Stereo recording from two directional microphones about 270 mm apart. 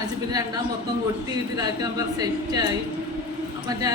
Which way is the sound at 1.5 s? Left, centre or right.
Centre.